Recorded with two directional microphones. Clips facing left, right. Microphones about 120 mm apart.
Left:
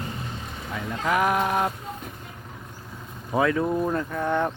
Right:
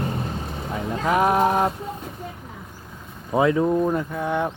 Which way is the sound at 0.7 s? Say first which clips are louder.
Right 3 dB; 25° right (ahead or behind).